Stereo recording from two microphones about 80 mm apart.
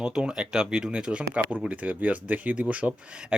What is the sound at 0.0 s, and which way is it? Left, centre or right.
Speech, centre.